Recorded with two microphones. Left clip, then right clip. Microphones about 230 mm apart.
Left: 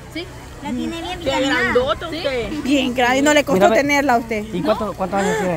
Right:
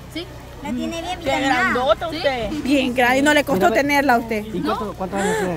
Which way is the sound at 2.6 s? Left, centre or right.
Centre.